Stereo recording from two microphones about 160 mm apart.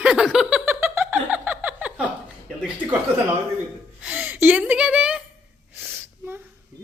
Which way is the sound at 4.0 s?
10° right (ahead or behind).